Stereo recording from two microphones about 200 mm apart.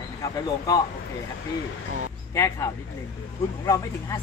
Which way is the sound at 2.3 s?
15° left (ahead or behind).